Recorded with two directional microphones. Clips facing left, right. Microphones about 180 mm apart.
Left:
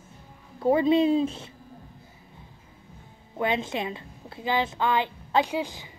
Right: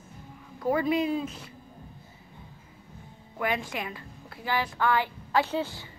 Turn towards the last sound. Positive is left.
turn(degrees=15)  # may be behind; listen again after turning